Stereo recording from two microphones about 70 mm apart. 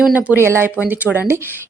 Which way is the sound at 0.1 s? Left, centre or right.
Centre.